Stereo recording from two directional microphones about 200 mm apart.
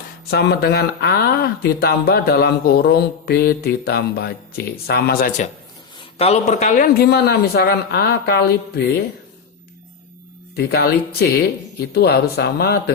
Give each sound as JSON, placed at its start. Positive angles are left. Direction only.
{"t": 0.3, "sound": "speech", "side_deg": 55}
{"t": 6.0, "sound": "speech", "side_deg": 30}
{"t": 10.5, "sound": "speech", "side_deg": 50}